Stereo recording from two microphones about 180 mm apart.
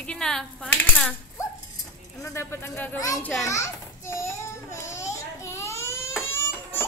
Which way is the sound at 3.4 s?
15° left (ahead or behind).